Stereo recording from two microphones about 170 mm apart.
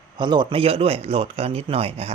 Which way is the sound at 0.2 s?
25° right (ahead or behind).